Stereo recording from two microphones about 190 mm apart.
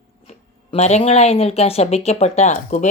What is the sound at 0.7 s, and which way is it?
A woman's voice, 35° left (ahead or behind).